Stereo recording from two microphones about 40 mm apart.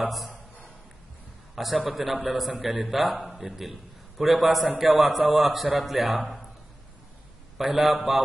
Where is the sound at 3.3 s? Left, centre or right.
Right.